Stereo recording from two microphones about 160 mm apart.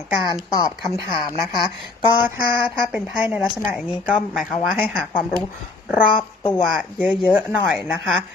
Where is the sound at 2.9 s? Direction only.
10° right (ahead or behind).